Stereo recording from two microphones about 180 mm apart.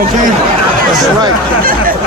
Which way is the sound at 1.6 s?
50° right (ahead or behind).